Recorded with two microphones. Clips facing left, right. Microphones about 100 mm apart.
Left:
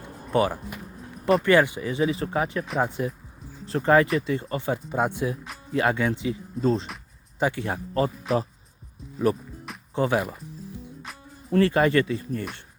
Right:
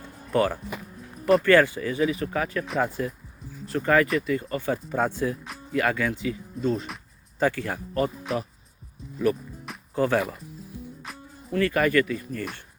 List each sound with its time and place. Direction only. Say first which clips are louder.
0.3 s speech: even; 20° left (ahead or behind)
6.6 s speech: left 3 dB; 35° left (ahead or behind)
7.3 s speech: right 1 dB; 20° left (ahead or behind)
9.3 s speech: even; 30° left (ahead or behind)
9.9 s speech: even; 20° left (ahead or behind)
11.5 s speech: left 2 dB; 25° left (ahead or behind)